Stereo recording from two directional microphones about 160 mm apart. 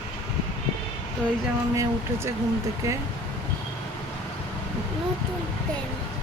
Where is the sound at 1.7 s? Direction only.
20° right (ahead or behind).